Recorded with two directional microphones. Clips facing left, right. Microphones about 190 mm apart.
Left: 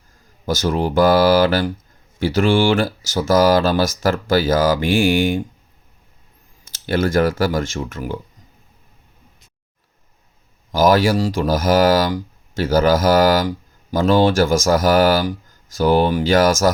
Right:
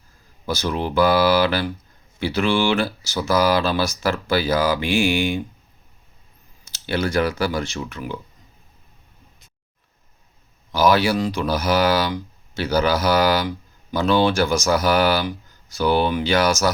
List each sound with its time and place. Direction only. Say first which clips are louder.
0.4 s speech: left 4 dB; 45° left (ahead or behind)
6.7 s speech: left 4 dB; 50° left (ahead or behind)
10.7 s speech: left 3 dB; 45° left (ahead or behind)